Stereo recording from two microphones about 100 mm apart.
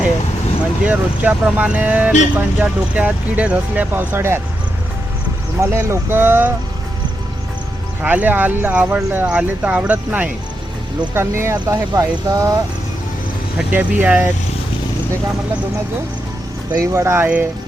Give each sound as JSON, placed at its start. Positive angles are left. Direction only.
{"t": 0.9, "sound": "speech", "side_deg": -15}
{"t": 5.5, "sound": "speech", "side_deg": -30}
{"t": 8.0, "sound": "speech", "side_deg": -15}
{"t": 11.7, "sound": "speech", "side_deg": -35}
{"t": 13.6, "sound": "speech", "side_deg": -15}
{"t": 16.7, "sound": "speech", "side_deg": -30}